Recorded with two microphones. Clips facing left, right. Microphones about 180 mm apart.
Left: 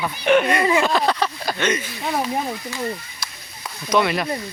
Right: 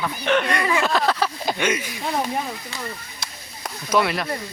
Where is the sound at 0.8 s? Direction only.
Centre (ahead or behind).